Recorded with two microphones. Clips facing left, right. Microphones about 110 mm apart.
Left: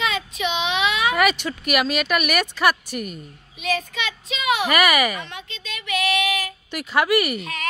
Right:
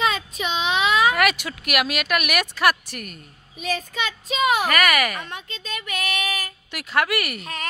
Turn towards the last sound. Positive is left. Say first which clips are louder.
# left 4 dB
turn(degrees=0)  # may be behind; listen again after turning